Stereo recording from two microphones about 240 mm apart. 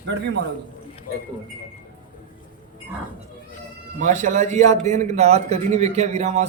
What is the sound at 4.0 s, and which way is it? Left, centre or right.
A man's voice, right.